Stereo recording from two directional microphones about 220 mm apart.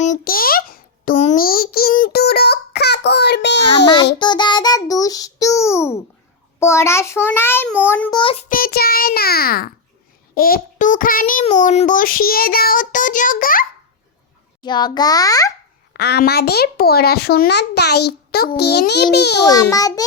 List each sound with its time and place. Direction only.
0.0 s a sound: 35° left (ahead or behind)
4.2 s child singing: 20° left (ahead or behind)
8.1 s child singing: 25° left (ahead or behind)
8.4 s a child's voice: 40° left (ahead or behind)
14.6 s child singing: 20° left (ahead or behind)
15.9 s a child's voice: 50° left (ahead or behind)
19.7 s child singing: 15° left (ahead or behind)